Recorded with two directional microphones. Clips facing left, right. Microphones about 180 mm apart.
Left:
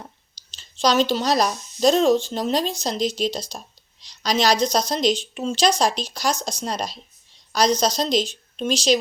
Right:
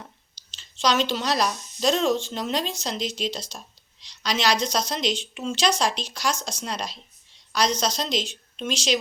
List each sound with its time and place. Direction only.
0.5 s speech: 35° left (ahead or behind)